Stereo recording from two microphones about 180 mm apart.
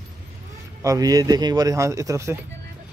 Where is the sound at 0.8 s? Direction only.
20° right (ahead or behind).